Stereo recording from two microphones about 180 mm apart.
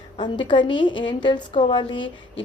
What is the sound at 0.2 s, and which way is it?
A woman's voice, 25° left (ahead or behind).